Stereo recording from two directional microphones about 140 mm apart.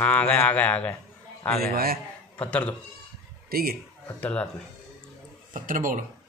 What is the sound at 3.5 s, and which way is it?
Speech, 90° right.